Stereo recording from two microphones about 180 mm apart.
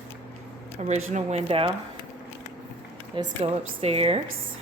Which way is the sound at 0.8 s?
40° right (ahead or behind).